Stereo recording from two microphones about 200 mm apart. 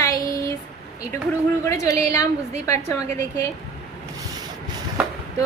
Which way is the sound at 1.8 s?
15° left (ahead or behind).